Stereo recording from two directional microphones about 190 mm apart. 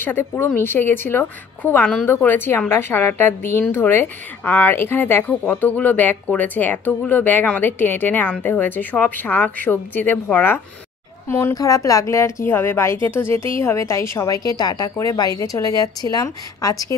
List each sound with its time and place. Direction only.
0.0 s a woman's voice: 10° left (ahead or behind)